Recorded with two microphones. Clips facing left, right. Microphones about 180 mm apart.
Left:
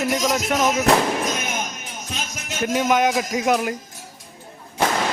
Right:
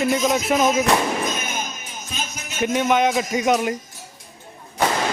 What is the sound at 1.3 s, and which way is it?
Music, 70° left (ahead or behind).